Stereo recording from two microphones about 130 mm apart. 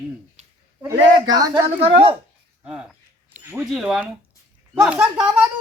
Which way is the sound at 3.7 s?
5° right (ahead or behind).